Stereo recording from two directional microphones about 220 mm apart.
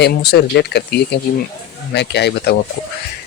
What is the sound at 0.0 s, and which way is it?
Speech, 45° left (ahead or behind).